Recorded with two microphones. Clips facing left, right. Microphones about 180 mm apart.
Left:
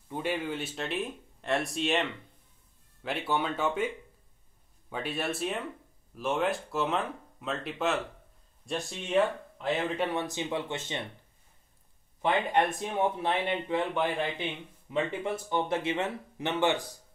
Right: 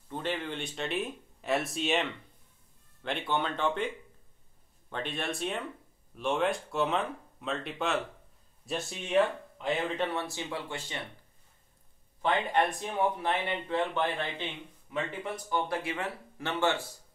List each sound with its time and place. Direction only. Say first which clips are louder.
0.1 s speech: left 2 dB; 10° left (ahead or behind)
9.9 s speech: left 2 dB; 15° left (ahead or behind)
12.2 s speech: left 1 dB; 20° left (ahead or behind)
14.9 s speech: left 4 dB; 25° left (ahead or behind)